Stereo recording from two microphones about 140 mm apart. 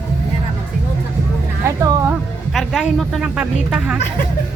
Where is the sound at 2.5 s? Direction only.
Centre (ahead or behind).